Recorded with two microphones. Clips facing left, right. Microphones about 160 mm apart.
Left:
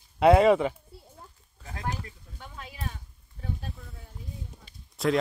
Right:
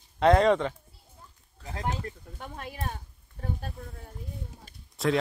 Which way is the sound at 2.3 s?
50° right (ahead or behind).